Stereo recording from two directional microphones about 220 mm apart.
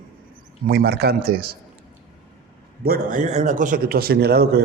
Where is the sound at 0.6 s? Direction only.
45° right (ahead or behind).